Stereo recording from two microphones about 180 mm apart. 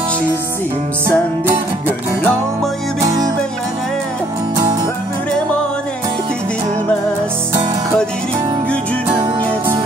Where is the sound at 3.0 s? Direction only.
20° right (ahead or behind).